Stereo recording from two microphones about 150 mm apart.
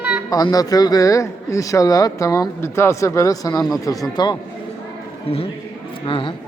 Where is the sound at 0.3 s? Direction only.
25° left (ahead or behind).